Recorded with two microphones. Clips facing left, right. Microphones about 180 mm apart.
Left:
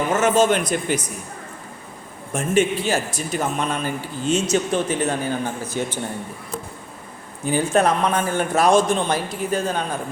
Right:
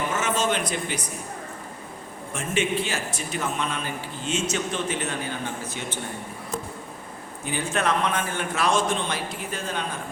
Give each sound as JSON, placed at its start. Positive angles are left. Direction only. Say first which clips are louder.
{"t": 0.1, "sound": "speech", "louder": "left 11 dB", "side_deg": 45}
{"t": 2.3, "sound": "speech", "louder": "left 6 dB", "side_deg": 40}
{"t": 7.4, "sound": "speech", "louder": "left 7 dB", "side_deg": 40}